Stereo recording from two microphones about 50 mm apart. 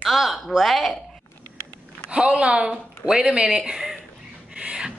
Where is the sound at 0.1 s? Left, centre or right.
Centre.